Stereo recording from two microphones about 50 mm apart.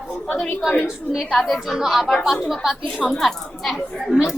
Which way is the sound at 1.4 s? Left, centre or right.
Centre.